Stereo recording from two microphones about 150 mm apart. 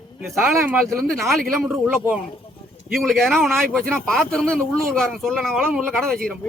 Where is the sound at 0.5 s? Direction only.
15° right (ahead or behind).